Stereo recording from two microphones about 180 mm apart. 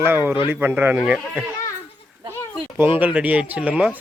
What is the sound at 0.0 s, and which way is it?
A man's voice, 10° right (ahead or behind).